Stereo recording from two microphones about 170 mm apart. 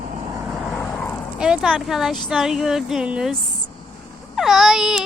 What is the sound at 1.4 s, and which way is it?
Speech, 5° right (ahead or behind).